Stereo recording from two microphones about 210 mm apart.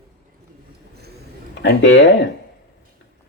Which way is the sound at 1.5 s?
55° left (ahead or behind).